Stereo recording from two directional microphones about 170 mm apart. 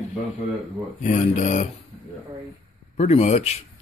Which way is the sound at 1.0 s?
45° left (ahead or behind).